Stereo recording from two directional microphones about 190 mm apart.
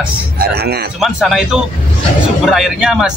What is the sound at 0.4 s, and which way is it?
Speech, 55° right (ahead or behind).